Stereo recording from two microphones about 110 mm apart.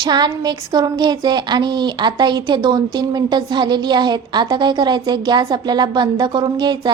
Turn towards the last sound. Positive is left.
turn(degrees=-40)  # may be behind; listen again after turning